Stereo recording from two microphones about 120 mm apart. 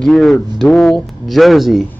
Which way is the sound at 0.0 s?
Centre (ahead or behind).